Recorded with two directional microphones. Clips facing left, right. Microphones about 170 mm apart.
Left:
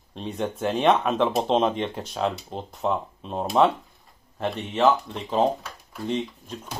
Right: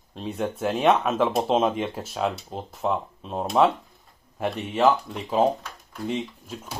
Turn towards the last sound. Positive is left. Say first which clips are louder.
# even
turn(degrees=-5)  # may be behind; listen again after turning